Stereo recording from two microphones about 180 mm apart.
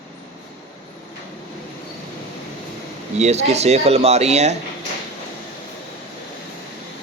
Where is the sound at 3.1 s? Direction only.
35° right (ahead or behind).